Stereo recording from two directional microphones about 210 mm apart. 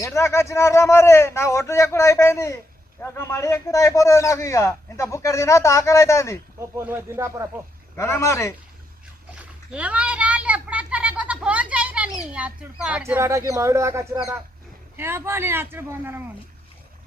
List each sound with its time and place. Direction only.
0.0 s a man's voice: 15° left (ahead or behind)
6.6 s speech: 10° right (ahead or behind)
7.9 s a man's voice: 15° left (ahead or behind)
9.7 s a sound: 5° right (ahead or behind)
12.3 s speech: 5° right (ahead or behind)